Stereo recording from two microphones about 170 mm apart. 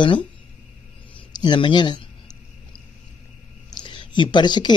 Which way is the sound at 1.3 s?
25° left (ahead or behind).